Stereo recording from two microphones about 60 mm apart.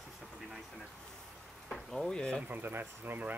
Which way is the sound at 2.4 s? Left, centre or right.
Right.